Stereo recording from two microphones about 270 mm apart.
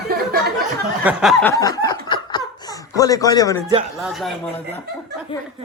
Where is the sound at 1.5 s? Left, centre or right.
Centre.